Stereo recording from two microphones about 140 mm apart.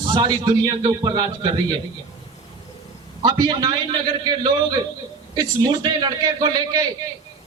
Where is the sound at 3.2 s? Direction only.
30° right (ahead or behind).